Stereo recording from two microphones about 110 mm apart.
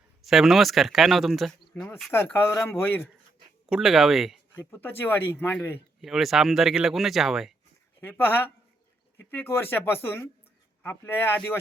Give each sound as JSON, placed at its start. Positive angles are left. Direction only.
{"t": 0.2, "sound": "speech", "side_deg": 0}
{"t": 1.7, "sound": "speech", "side_deg": 20}
{"t": 3.7, "sound": "speech", "side_deg": -5}
{"t": 4.5, "sound": "speech", "side_deg": 20}
{"t": 6.0, "sound": "speech", "side_deg": 0}
{"t": 8.0, "sound": "speech", "side_deg": 20}